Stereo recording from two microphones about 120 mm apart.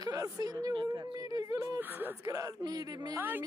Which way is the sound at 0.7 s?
30° right (ahead or behind).